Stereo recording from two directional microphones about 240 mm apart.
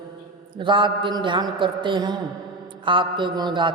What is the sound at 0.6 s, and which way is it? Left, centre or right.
A woman's voice, centre.